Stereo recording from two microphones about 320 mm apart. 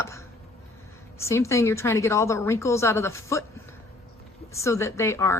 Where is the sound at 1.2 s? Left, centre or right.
Centre.